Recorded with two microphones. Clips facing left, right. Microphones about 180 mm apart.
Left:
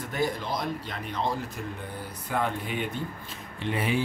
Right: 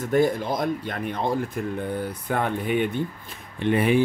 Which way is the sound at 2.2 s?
55° right (ahead or behind).